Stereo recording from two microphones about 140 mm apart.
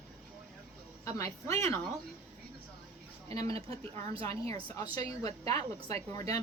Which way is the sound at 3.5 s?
40° right (ahead or behind).